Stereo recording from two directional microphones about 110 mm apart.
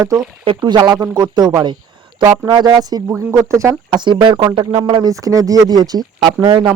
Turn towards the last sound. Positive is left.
turn(degrees=-40)  # may be behind; listen again after turning